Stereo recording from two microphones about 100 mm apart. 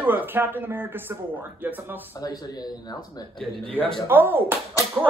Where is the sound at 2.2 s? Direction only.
40° left (ahead or behind).